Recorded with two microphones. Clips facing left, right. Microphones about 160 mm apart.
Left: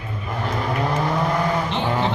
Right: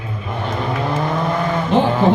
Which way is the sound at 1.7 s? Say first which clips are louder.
Right 10 dB; 45° right (ahead or behind).